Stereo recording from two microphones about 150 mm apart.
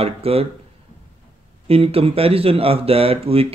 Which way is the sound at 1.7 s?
40° right (ahead or behind).